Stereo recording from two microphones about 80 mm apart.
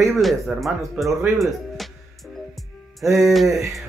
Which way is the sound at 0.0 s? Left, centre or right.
Centre.